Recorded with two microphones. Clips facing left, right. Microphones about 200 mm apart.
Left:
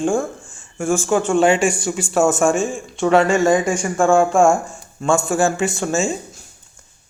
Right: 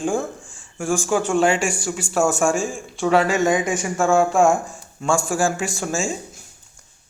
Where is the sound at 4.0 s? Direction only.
5° right (ahead or behind).